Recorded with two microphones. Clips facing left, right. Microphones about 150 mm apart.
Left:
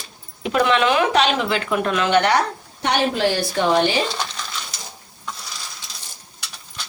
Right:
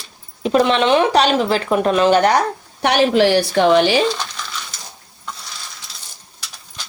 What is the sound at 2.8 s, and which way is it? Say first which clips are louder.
A woman's voice: right 6 dB; 80° right.